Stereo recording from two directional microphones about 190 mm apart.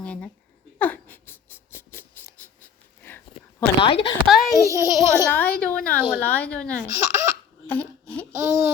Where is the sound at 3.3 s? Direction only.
25° left (ahead or behind).